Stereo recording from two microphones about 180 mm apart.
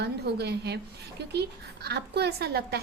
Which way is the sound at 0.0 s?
65° right (ahead or behind).